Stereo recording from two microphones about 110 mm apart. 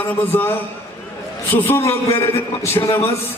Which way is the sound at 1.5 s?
20° left (ahead or behind).